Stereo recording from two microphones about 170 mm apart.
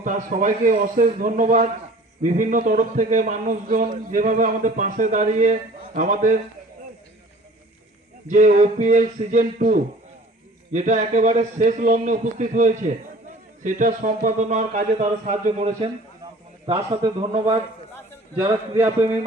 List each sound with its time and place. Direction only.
0.0 s a man's voice: 50° right (ahead or behind)
8.3 s a man's voice: 50° right (ahead or behind); by 18.9 s 30° right (ahead or behind)